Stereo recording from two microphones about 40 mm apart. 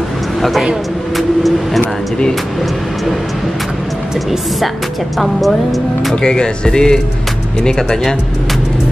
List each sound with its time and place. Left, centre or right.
0.4 s a man's voice: centre
1.1 s vehicle: centre
5.2 s speech: centre
6.2 s speech: left